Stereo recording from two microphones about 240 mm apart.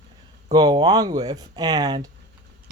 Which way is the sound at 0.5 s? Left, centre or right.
Centre.